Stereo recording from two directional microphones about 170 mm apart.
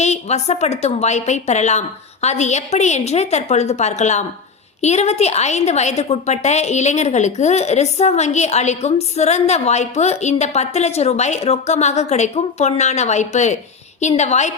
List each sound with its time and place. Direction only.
0.0 s a woman's voice: 40° left (ahead or behind)